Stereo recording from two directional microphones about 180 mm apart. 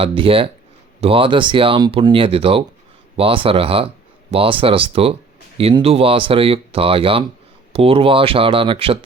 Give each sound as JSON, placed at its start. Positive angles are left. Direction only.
{"t": 0.0, "sound": "speech", "side_deg": -30}